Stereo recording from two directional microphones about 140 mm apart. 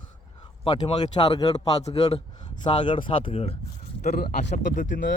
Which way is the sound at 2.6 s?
35° left (ahead or behind).